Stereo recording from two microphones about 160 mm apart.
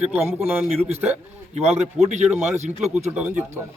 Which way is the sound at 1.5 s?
45° right (ahead or behind).